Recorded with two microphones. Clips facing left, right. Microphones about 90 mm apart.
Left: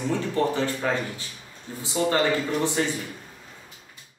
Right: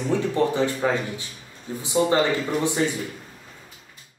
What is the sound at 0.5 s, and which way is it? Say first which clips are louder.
Speech: right 3 dB; 20° right (ahead or behind).